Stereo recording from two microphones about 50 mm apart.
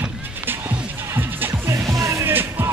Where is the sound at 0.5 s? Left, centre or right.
Right.